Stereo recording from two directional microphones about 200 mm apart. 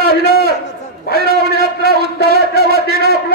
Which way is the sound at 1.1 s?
50° right (ahead or behind).